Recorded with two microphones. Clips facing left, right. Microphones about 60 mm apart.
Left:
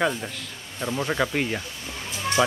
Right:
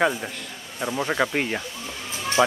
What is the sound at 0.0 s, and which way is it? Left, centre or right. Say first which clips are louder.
Speech: right 2 dB; centre.